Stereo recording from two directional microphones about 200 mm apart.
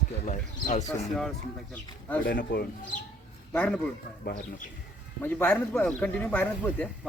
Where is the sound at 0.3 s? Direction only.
35° left (ahead or behind).